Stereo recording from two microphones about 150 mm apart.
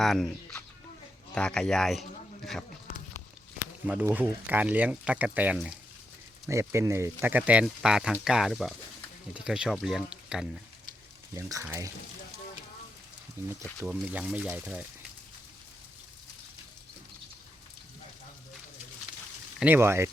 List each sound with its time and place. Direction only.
0.0 s speech: centre (ahead or behind)
4.0 s speech: 10° right (ahead or behind)
11.3 s speech: 20° right (ahead or behind)
13.4 s speech: 15° right (ahead or behind)
19.5 s speech: 15° right (ahead or behind)